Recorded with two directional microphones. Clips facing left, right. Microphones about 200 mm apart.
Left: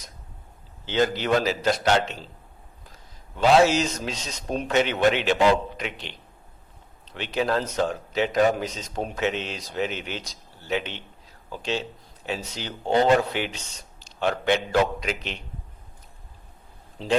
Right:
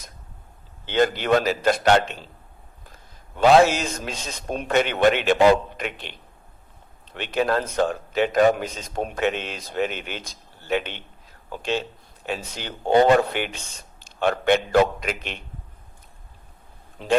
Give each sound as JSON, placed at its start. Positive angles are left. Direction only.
{"t": 0.9, "sound": "a man's voice", "side_deg": -55}
{"t": 17.0, "sound": "a man's voice", "side_deg": -55}